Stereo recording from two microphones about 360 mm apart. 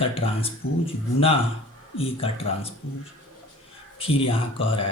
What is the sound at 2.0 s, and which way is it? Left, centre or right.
Speech, centre.